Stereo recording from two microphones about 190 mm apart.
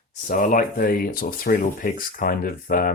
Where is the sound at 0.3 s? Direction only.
45° left (ahead or behind).